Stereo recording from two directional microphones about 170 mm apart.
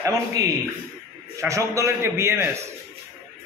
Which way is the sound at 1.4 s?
20° right (ahead or behind).